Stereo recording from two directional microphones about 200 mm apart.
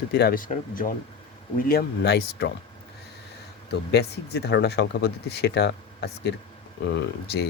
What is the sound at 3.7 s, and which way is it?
Speech, 55° left (ahead or behind).